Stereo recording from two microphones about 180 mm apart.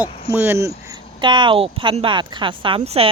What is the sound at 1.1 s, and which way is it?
Speech, 25° right (ahead or behind).